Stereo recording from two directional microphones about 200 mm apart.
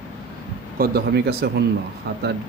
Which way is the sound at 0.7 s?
55° right (ahead or behind).